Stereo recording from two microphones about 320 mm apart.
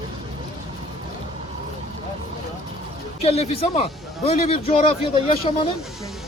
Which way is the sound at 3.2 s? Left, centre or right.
Centre.